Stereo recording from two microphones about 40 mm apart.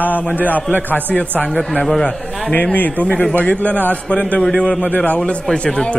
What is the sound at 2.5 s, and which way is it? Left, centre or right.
A man's voice, left.